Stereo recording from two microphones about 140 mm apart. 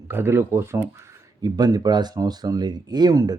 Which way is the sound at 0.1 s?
15° right (ahead or behind).